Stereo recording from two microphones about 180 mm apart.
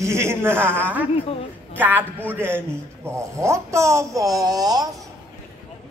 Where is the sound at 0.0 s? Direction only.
15° right (ahead or behind).